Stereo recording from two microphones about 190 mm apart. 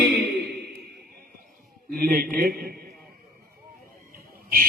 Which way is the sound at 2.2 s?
55° right (ahead or behind).